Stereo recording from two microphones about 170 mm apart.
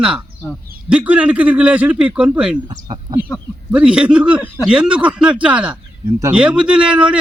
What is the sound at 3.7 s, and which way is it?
A man's voice, 5° right (ahead or behind).